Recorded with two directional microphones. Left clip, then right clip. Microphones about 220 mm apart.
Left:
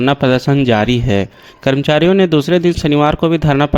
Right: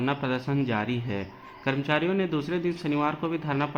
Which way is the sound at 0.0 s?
55° left (ahead or behind).